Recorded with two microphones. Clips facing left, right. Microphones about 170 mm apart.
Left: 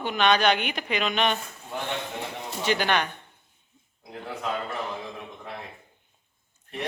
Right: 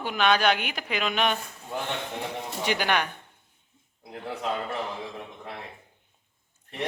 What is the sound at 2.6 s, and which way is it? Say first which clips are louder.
Speech: left 2 dB; 10° right (ahead or behind).